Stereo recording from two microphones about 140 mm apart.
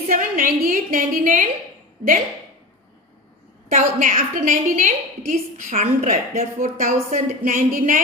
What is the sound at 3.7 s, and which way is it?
A woman's voice, 55° right (ahead or behind).